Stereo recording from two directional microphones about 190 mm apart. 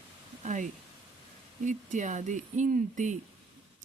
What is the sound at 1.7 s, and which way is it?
A woman's voice, 40° right (ahead or behind).